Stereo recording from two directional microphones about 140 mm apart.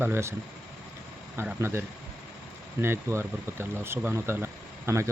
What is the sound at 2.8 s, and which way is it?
Speech, 15° right (ahead or behind).